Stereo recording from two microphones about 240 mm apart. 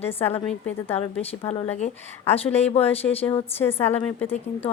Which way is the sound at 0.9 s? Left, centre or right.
Left.